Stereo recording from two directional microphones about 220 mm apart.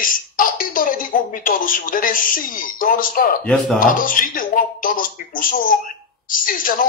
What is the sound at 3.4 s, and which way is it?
Speech, centre (ahead or behind).